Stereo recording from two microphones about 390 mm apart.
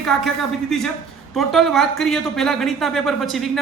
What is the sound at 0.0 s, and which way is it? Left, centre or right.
Speech, centre.